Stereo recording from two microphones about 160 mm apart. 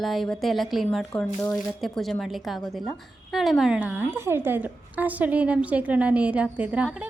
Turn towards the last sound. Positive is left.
turn(degrees=-10)  # may be behind; listen again after turning